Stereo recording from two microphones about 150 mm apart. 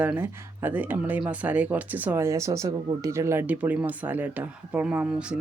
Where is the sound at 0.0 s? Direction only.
10° right (ahead or behind).